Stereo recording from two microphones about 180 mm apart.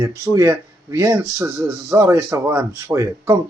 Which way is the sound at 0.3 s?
15° right (ahead or behind).